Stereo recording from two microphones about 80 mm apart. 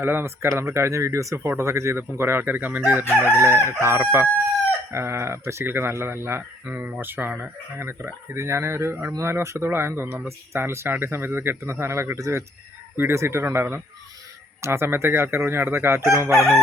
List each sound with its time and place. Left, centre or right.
0.0 s speech: right
3.3 s speech: right